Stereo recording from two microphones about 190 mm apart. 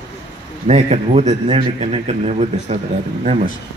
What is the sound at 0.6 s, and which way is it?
Speech, 35° right (ahead or behind).